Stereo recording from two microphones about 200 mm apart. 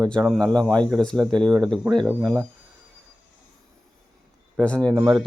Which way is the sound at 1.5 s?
5° right (ahead or behind).